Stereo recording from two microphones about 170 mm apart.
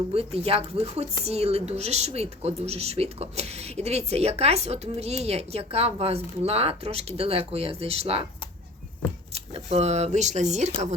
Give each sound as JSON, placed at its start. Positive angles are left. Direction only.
{"t": 0.1, "sound": "speech", "side_deg": -35}
{"t": 9.3, "sound": "speech", "side_deg": -35}